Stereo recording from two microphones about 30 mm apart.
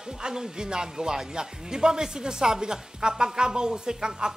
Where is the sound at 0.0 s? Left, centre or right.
Right.